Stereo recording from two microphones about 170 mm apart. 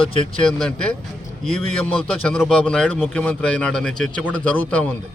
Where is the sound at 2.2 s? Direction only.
5° left (ahead or behind).